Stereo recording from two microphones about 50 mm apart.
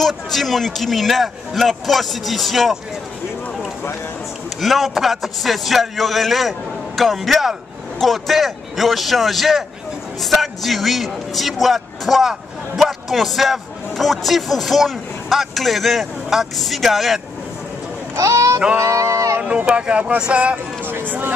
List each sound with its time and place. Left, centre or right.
0.0 s a man's voice: centre
4.6 s a man's voice: centre
18.1 s speech: right
18.8 s a sound: right
19.4 s speech: right
20.5 s speech: right